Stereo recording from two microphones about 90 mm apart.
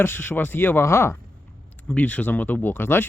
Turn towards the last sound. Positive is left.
turn(degrees=25)  # may be behind; listen again after turning